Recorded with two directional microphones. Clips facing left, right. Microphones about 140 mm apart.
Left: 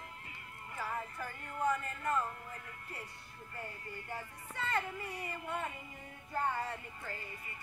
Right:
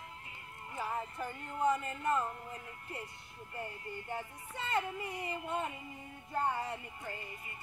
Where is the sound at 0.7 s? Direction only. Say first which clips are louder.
Right 2 dB; 20° right (ahead or behind).